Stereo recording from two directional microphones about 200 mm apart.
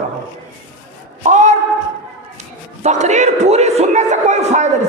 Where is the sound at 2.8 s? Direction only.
35° right (ahead or behind).